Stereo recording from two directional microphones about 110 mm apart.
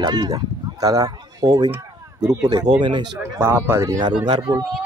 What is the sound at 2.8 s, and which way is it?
Speech, 45° right (ahead or behind).